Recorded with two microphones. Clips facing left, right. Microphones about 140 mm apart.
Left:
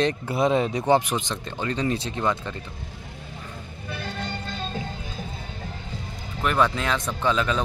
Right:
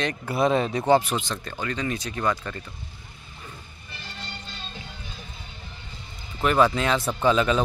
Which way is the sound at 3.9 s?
60° left (ahead or behind).